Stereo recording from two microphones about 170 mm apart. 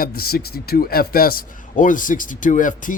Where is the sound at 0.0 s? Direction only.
60° left (ahead or behind).